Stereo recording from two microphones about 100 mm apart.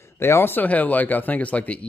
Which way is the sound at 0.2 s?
25° left (ahead or behind).